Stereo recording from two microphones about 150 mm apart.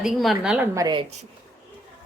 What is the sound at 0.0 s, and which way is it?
Speech, centre (ahead or behind).